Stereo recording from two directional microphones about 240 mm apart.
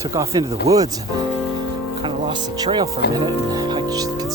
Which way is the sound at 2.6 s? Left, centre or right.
Centre.